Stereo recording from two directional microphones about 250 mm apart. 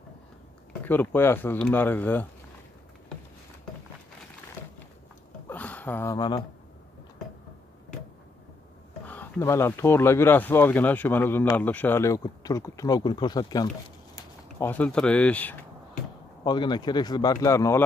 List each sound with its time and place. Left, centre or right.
0.8 s speech: centre
5.5 s a sound: centre
9.0 s speech: centre
16.4 s speech: centre